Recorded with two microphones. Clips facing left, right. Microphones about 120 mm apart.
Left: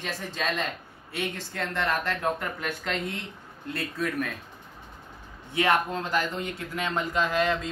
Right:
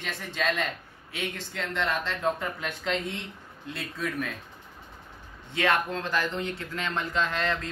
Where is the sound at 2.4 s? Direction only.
Centre (ahead or behind).